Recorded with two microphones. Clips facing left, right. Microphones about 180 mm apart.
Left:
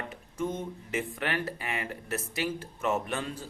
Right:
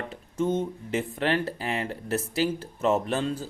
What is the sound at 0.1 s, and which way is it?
Speech, 30° right (ahead or behind).